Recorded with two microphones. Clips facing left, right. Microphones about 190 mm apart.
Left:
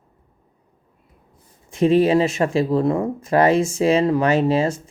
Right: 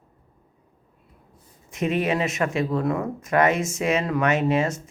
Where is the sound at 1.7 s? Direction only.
30° left (ahead or behind).